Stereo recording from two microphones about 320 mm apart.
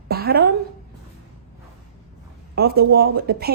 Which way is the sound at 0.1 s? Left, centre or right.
Right.